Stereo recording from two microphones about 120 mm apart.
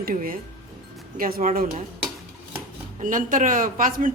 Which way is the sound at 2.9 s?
90° right.